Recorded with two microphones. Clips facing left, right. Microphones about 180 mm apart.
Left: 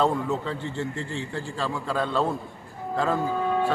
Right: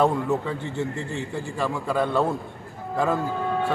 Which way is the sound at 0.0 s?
10° right (ahead or behind).